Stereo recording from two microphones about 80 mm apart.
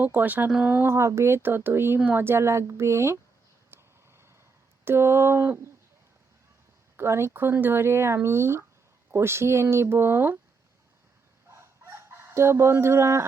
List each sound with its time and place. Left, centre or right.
0.0 s speech: right
0.9 s speech: right
3.7 s vehicle: right
4.9 s speech: right
6.9 s speech: right
11.5 s chicken: right